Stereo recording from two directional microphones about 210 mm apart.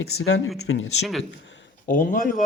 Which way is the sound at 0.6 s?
75° left (ahead or behind).